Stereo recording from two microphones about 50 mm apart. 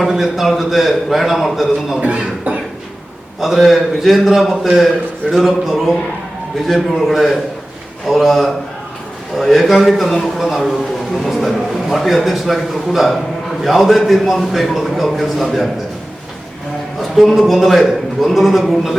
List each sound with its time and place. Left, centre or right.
0.0 s a man's voice: centre
2.0 s speech: right
3.4 s a man's voice: centre
17.0 s a man's voice: centre